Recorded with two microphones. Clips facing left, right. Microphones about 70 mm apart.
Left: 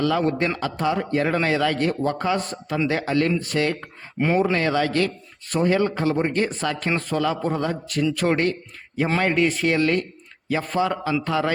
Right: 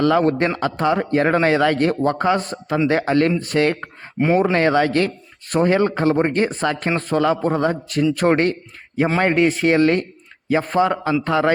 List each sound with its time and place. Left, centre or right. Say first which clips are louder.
0.0 s a man's voice: right 5 dB; right